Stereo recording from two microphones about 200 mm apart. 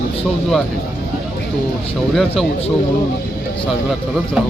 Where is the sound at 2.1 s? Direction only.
Centre (ahead or behind).